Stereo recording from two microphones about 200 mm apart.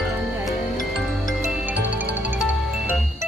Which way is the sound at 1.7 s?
10° right (ahead or behind).